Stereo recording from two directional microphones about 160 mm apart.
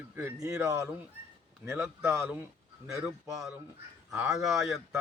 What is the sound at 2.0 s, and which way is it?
A man's voice, 15° right (ahead or behind).